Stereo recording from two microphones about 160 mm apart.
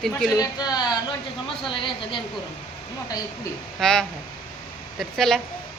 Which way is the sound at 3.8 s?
5° left (ahead or behind).